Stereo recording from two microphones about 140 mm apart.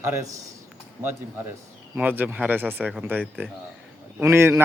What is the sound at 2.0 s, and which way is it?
A man's voice, 10° right (ahead or behind).